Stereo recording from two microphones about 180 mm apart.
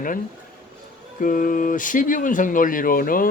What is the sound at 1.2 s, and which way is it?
Speech, 50° left (ahead or behind).